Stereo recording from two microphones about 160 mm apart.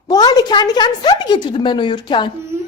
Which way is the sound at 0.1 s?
25° left (ahead or behind).